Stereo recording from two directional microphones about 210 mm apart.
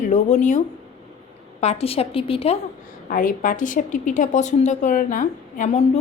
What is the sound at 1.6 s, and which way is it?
Speech, 30° left (ahead or behind).